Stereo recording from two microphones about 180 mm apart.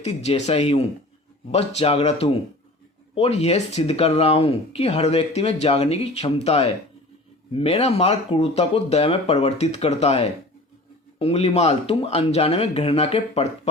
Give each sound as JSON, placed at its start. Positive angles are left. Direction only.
{"t": 0.0, "sound": "speech", "side_deg": 35}